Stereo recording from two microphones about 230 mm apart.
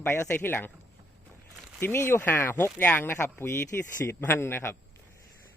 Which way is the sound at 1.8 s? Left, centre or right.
Centre.